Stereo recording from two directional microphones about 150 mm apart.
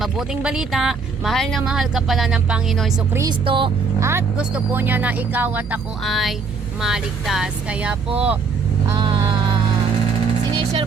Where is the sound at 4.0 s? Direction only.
15° right (ahead or behind).